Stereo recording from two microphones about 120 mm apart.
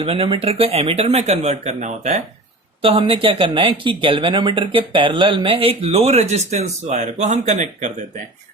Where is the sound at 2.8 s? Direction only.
50° right (ahead or behind).